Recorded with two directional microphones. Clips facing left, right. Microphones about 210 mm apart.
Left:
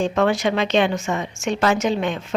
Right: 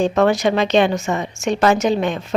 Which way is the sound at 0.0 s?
40° right (ahead or behind).